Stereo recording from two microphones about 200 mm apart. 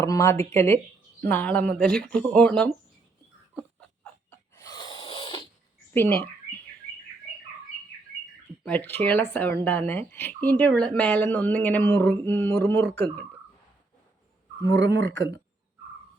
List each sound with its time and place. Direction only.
0.0 s speech: 15° left (ahead or behind)
3.5 s a sound: 10° left (ahead or behind); by 5.5 s 25° left (ahead or behind)
5.9 s speech: 10° left (ahead or behind)
8.6 s speech: 10° left (ahead or behind)
14.7 s speech: 60° right (ahead or behind)